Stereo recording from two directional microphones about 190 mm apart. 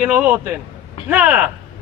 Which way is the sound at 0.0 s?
10° right (ahead or behind).